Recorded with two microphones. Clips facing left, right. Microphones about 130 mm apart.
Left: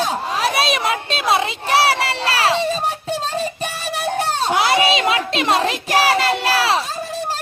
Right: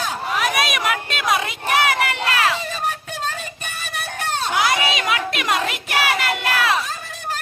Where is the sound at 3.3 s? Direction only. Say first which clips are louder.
Left 9 dB; 35° left (ahead or behind).